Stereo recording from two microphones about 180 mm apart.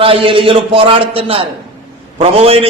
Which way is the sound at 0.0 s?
30° right (ahead or behind).